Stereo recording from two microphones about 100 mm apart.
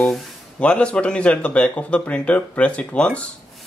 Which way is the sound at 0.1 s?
10° left (ahead or behind).